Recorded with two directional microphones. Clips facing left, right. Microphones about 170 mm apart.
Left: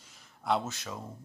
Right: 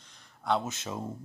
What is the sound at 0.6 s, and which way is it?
Speech, 25° right (ahead or behind).